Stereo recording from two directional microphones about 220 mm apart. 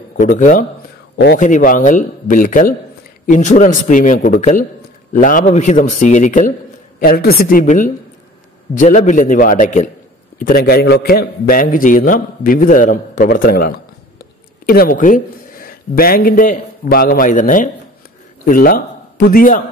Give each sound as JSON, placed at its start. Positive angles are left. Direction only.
{"t": 0.2, "sound": "a man's voice", "side_deg": 35}